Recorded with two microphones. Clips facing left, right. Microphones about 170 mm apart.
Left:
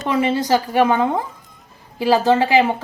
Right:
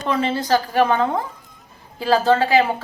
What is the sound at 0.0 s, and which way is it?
Speech, 15° left (ahead or behind).